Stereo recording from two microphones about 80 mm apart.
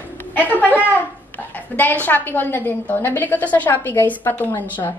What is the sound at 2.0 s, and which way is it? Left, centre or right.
A woman's voice, left.